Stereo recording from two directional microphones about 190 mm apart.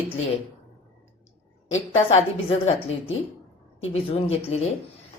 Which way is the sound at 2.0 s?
30° left (ahead or behind).